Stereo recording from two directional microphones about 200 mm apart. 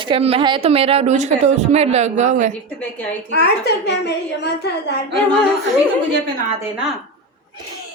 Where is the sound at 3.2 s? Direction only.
55° left (ahead or behind).